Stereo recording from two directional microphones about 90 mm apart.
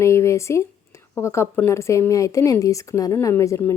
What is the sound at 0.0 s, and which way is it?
Speech, 30° left (ahead or behind).